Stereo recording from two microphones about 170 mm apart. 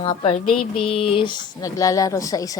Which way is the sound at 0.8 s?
35° left (ahead or behind).